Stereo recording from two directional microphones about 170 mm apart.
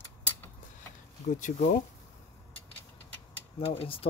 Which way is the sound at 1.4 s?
50° left (ahead or behind).